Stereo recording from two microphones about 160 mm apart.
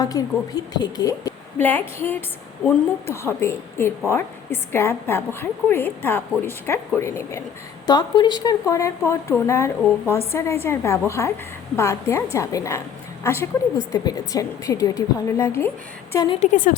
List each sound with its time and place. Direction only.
0.0 s a woman's voice: 25° left (ahead or behind)
2.6 s a woman's voice: 15° left (ahead or behind)
7.9 s a woman's voice: 25° left (ahead or behind)
16.1 s a woman's voice: 25° left (ahead or behind)
16.4 s a woman's voice: 55° left (ahead or behind)